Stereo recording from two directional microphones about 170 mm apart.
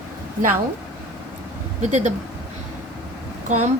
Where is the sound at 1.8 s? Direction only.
45° right (ahead or behind).